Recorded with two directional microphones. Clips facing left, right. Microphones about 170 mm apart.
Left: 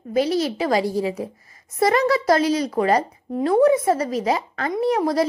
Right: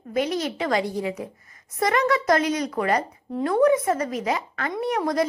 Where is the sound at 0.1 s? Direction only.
30° left (ahead or behind).